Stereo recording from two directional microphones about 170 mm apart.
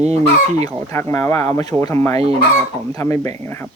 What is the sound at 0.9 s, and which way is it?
Speech, 15° left (ahead or behind).